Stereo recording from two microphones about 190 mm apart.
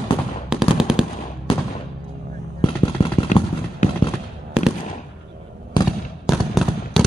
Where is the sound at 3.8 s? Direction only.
40° left (ahead or behind).